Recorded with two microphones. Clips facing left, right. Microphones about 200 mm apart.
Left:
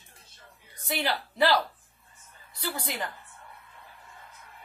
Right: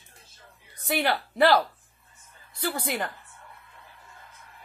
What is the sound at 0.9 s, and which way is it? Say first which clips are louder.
Speech: right 4 dB; 55° right (ahead or behind).